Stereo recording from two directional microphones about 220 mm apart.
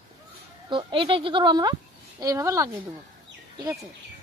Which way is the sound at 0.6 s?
20° right (ahead or behind).